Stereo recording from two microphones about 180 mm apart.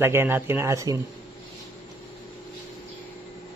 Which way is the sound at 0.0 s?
15° right (ahead or behind).